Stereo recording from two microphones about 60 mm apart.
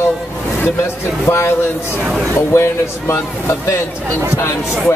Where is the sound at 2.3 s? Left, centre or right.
Left.